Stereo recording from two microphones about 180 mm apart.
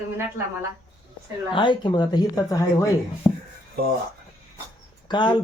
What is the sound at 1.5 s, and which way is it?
A man's voice, 25° left (ahead or behind).